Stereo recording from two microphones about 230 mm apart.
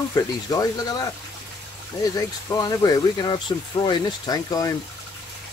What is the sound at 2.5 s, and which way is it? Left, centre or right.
Speech, centre.